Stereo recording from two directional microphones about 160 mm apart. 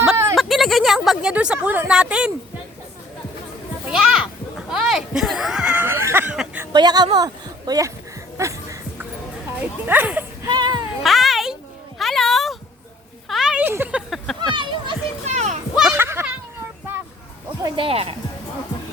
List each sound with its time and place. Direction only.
0.0 s a sound: 5° right (ahead or behind)
0.3 s speech: centre (ahead or behind)
3.8 s a sound: 5° right (ahead or behind)
6.7 s a woman's voice: 25° right (ahead or behind)
8.4 s music: 20° right (ahead or behind)
9.6 s speech: 10° right (ahead or behind)
10.4 s whimper: 25° right (ahead or behind)
11.0 s a child's voice: centre (ahead or behind)
14.5 s speech: 30° right (ahead or behind)
15.3 s children playing: 45° right (ahead or behind)
15.7 s children playing: 5° right (ahead or behind)
16.0 s children playing: 15° right (ahead or behind)
17.6 s speech: 35° right (ahead or behind)